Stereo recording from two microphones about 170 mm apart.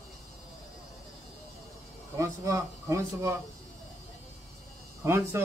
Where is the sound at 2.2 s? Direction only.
20° right (ahead or behind).